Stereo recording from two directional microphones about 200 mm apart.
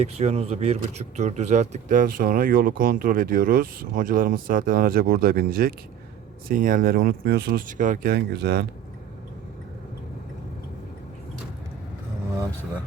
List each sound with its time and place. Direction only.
0.0 s speech: 30° right (ahead or behind); by 8.6 s 55° right (ahead or behind)